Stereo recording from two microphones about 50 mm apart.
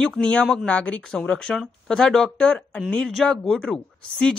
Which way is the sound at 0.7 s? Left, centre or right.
Left.